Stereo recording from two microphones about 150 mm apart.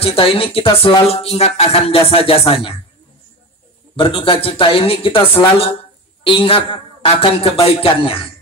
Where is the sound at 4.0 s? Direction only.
35° left (ahead or behind).